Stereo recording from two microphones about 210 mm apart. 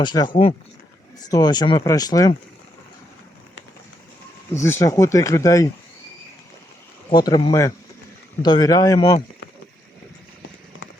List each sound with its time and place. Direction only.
0.0 s speech: 20° left (ahead or behind)
4.5 s speech: 15° left (ahead or behind)
7.1 s speech: 20° left (ahead or behind)